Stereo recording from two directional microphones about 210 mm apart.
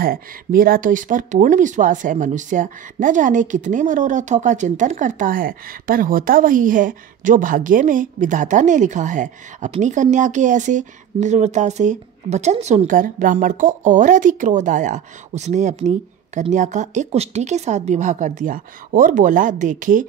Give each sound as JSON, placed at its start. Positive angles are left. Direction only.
{"t": 0.0, "sound": "speech", "side_deg": -45}